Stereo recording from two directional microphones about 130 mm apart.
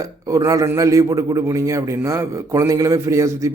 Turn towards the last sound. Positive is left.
turn(degrees=-25)  # may be behind; listen again after turning